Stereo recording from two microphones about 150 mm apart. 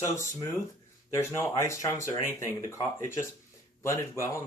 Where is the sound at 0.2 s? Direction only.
20° left (ahead or behind).